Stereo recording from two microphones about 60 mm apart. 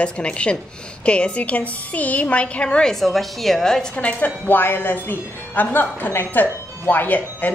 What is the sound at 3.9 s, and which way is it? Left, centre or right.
Speech, left.